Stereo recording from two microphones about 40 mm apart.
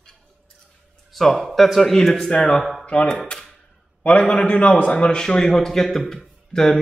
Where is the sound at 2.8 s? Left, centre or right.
Left.